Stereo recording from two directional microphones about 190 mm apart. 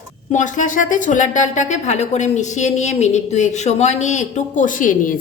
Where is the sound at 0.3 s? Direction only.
40° left (ahead or behind).